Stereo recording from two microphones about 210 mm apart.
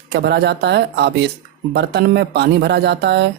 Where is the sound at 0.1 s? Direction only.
50° right (ahead or behind).